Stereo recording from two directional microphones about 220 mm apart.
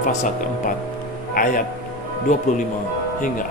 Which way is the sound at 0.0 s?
40° left (ahead or behind).